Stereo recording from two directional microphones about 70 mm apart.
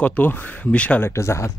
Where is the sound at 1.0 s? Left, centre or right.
Left.